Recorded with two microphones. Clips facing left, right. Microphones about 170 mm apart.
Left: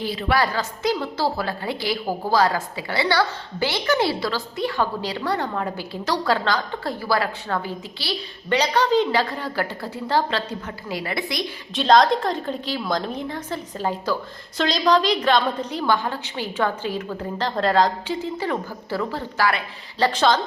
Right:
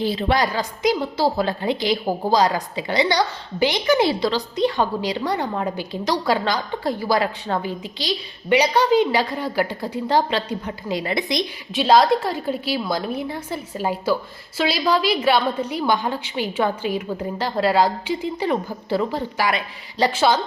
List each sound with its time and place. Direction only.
0.0 s a woman's voice: 25° right (ahead or behind)
0.4 s a woman's voice: 15° right (ahead or behind)
11.7 s a woman's voice: 5° right (ahead or behind)